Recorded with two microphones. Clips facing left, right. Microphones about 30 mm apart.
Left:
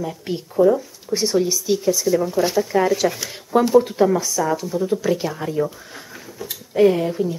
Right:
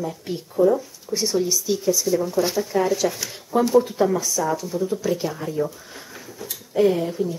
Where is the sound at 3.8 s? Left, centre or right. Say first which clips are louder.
Left 3 dB; left.